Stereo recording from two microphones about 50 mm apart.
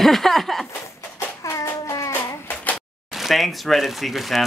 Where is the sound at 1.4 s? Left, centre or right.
Left.